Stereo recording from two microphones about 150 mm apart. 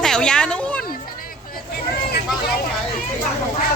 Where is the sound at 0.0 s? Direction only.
5° left (ahead or behind).